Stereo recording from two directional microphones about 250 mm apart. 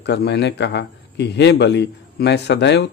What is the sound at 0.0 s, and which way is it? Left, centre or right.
Speech, left.